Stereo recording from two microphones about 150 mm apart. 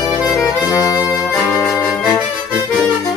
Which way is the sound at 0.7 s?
25° left (ahead or behind).